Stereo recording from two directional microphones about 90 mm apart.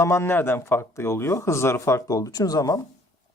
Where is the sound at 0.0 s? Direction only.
30° left (ahead or behind).